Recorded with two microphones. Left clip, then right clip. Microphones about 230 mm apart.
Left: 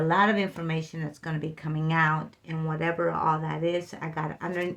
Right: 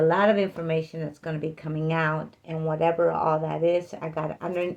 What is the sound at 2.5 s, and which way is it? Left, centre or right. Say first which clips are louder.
Speech: right 6 dB; left.